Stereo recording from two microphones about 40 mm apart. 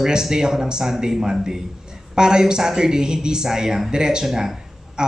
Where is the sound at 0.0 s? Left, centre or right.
Centre.